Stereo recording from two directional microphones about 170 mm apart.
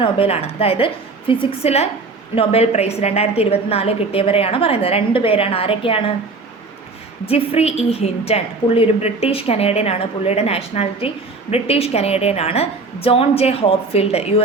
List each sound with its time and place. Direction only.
0.0 s a woman's voice: 35° left (ahead or behind)
7.3 s a woman's voice: 35° left (ahead or behind)